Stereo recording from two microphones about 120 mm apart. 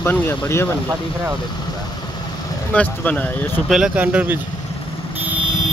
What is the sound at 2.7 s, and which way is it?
Speech, 10° left (ahead or behind).